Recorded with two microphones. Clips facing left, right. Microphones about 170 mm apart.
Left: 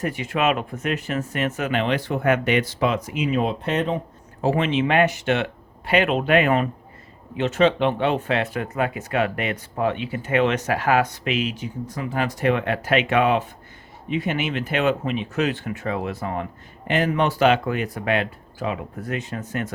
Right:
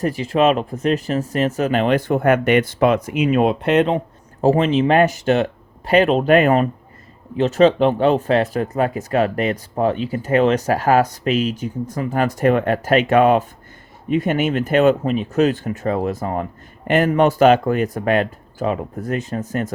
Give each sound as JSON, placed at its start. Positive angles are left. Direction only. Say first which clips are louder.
{"t": 0.0, "sound": "speech", "louder": "right 6 dB", "side_deg": -35}
{"t": 4.4, "sound": "speech", "louder": "right 5 dB", "side_deg": -40}